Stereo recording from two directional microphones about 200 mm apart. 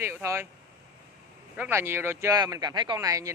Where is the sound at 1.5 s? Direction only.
10° right (ahead or behind).